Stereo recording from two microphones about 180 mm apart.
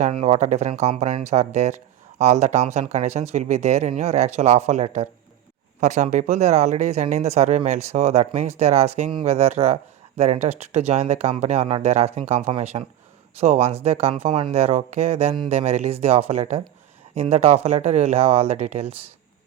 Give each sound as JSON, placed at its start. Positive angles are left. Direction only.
{"t": 0.0, "sound": "speech", "side_deg": -35}